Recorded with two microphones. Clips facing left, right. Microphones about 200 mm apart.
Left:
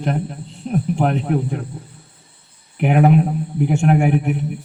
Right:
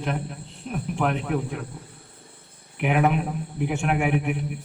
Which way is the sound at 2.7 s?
40° left (ahead or behind).